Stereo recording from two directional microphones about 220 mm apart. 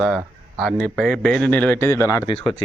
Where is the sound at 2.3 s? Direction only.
25° left (ahead or behind).